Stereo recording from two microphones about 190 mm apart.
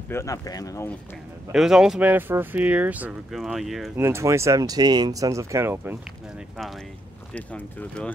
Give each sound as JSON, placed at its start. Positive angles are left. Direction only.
{"t": 0.1, "sound": "speech", "side_deg": 15}
{"t": 1.5, "sound": "speech", "side_deg": 0}
{"t": 4.0, "sound": "speech", "side_deg": -15}
{"t": 7.3, "sound": "speech", "side_deg": 5}